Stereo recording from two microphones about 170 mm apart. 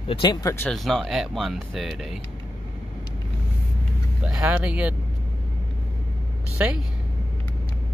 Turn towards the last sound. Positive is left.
turn(degrees=-5)  # may be behind; listen again after turning